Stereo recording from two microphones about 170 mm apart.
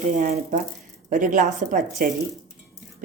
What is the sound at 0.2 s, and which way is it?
A woman's voice, 50° right (ahead or behind).